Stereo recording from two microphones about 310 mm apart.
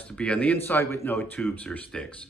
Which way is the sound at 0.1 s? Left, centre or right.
Centre.